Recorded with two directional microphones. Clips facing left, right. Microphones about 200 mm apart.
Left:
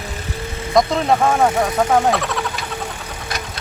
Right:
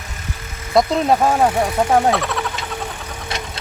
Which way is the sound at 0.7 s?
5° right (ahead or behind).